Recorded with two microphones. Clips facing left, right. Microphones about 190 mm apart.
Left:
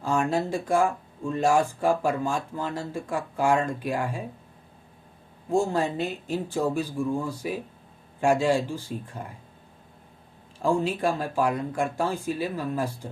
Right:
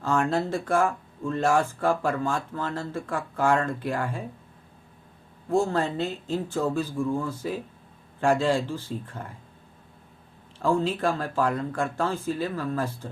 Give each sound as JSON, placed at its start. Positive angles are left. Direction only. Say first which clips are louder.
{"t": 0.0, "sound": "speech", "louder": "even", "side_deg": 15}
{"t": 5.5, "sound": "speech", "louder": "even", "side_deg": 15}
{"t": 10.6, "sound": "speech", "louder": "even", "side_deg": 15}